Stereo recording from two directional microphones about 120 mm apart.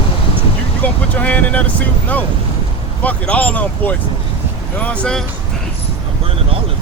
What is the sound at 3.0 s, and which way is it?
Speech, 15° left (ahead or behind).